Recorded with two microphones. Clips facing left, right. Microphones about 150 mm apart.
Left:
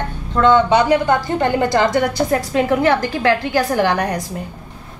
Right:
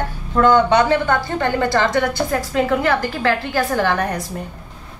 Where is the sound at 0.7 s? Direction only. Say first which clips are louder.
Left 2 dB; 10° left (ahead or behind).